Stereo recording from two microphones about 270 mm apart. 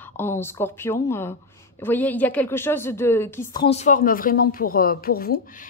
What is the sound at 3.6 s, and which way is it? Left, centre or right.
A woman's voice, left.